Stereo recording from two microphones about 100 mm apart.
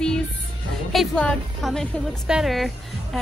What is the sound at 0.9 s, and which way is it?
Speech, centre (ahead or behind).